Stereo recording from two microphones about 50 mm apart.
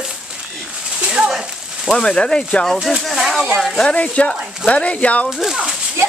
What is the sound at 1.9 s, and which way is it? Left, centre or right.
Speech, centre.